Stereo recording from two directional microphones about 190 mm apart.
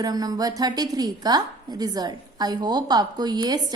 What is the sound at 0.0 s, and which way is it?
A woman's voice, 20° right (ahead or behind).